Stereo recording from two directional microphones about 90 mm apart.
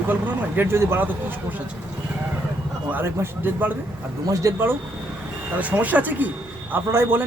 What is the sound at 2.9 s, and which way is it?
Speech, 25° right (ahead or behind).